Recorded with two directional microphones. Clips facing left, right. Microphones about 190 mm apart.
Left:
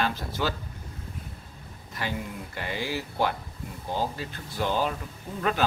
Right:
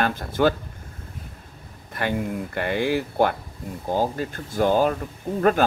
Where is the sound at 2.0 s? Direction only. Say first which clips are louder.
Right 8 dB; 55° right (ahead or behind).